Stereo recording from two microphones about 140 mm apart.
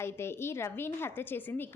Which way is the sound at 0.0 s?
15° left (ahead or behind).